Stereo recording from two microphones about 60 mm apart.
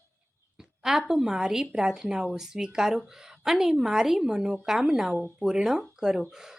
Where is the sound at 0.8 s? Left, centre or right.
Centre.